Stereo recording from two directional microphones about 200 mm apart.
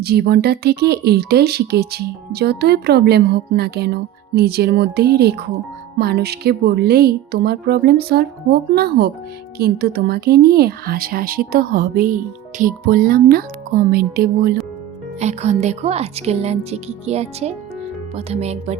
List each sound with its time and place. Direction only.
0.0 s speech: 50° right (ahead or behind)
15.2 s speech: 35° right (ahead or behind)